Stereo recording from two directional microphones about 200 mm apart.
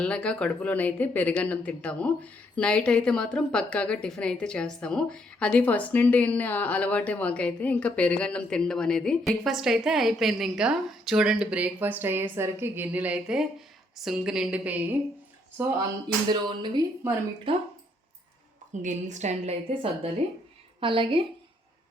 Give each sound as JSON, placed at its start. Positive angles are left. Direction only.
{"t": 0.0, "sound": "speech", "side_deg": 5}
{"t": 16.3, "sound": "speech", "side_deg": -20}
{"t": 18.7, "sound": "a woman's voice", "side_deg": -40}